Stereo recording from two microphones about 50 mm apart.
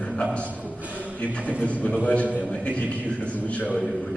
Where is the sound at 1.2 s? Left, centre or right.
Left.